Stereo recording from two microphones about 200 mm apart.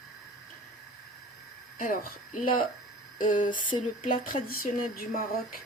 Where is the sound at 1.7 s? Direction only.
40° left (ahead or behind).